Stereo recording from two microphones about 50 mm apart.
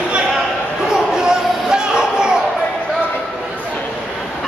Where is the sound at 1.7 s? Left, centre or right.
Centre.